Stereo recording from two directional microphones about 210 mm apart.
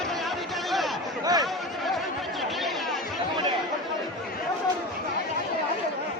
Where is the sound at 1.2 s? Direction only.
20° right (ahead or behind).